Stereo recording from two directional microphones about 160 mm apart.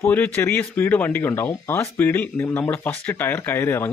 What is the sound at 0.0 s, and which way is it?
Speech, 15° left (ahead or behind).